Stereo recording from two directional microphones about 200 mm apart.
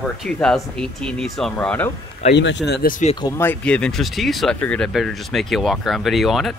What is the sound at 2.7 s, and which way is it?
Speech, 45° left (ahead or behind).